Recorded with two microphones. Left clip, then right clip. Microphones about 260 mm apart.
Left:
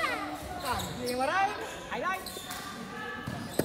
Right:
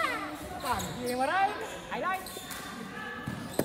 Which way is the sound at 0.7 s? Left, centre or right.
Right.